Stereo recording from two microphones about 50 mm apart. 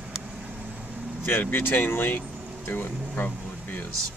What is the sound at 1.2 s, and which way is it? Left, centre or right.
Speech, left.